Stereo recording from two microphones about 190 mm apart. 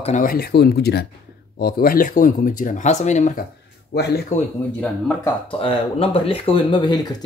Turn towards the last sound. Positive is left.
turn(degrees=20)  # may be behind; listen again after turning